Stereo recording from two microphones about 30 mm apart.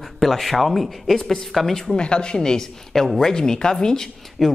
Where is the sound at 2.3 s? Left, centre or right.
Left.